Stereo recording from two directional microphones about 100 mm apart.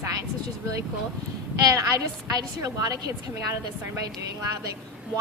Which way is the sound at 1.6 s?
35° right (ahead or behind).